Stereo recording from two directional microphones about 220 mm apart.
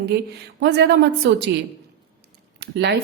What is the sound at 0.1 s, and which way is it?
A woman's voice, 50° right (ahead or behind).